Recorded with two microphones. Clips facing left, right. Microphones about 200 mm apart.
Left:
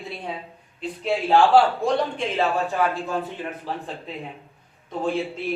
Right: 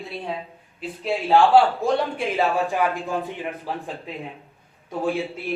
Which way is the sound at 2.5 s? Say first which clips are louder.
Right 1 dB; 15° right (ahead or behind).